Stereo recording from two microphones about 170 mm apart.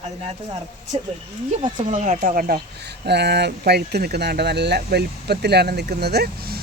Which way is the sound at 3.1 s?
85° right.